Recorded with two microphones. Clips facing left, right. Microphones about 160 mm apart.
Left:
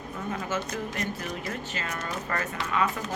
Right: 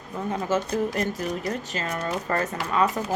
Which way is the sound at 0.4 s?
35° right (ahead or behind).